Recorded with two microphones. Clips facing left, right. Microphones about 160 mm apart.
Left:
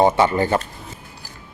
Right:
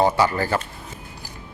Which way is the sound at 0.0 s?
20° left (ahead or behind).